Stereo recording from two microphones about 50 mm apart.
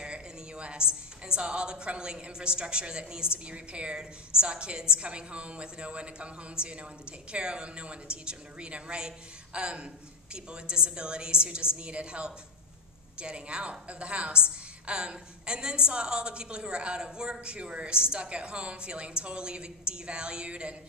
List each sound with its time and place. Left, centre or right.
0.0 s a woman's voice: right